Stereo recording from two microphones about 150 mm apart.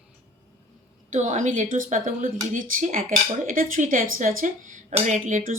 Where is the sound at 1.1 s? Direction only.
55° right (ahead or behind).